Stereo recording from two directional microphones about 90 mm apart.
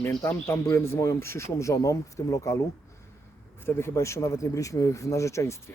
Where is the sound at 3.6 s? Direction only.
30° left (ahead or behind).